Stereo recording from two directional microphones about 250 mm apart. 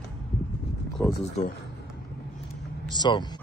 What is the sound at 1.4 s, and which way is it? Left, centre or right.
Speech, left.